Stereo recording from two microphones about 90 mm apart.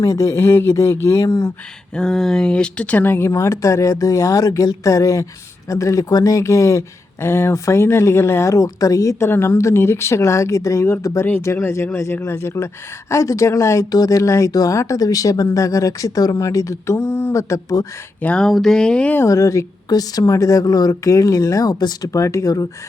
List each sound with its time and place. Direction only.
0.0 s speech: 35° left (ahead or behind)
2.0 s speech: 5° left (ahead or behind); by 17.8 s 35° left (ahead or behind)
18.2 s speech: 15° left (ahead or behind)
18.4 s speech: 5° left (ahead or behind)
19.1 s speech: 30° left (ahead or behind)